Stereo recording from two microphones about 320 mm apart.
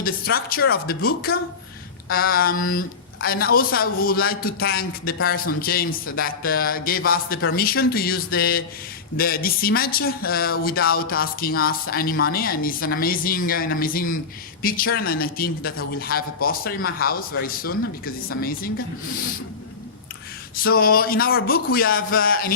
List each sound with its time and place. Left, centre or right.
0.0 s speech: left
20.7 s speech: left